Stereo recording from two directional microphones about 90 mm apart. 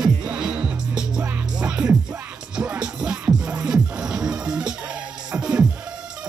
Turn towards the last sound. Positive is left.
turn(degrees=-15)  # may be behind; listen again after turning